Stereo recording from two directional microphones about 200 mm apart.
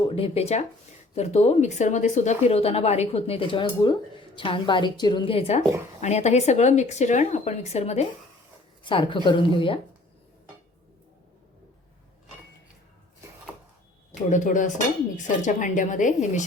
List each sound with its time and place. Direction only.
0.0 s a woman's voice: 30° left (ahead or behind)
14.3 s a woman's voice: 40° left (ahead or behind)